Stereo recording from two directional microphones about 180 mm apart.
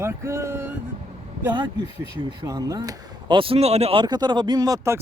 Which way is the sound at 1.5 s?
25° right (ahead or behind).